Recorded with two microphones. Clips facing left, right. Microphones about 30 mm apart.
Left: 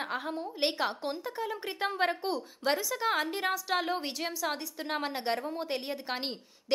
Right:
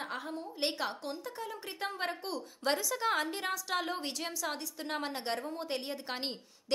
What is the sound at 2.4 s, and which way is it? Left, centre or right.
A woman's voice, centre.